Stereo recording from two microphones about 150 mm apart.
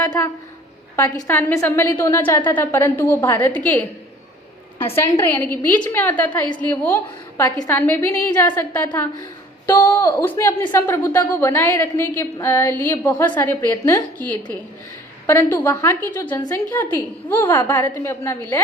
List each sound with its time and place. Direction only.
0.9 s a woman's voice: 15° left (ahead or behind)
4.9 s a woman's voice: 15° left (ahead or behind)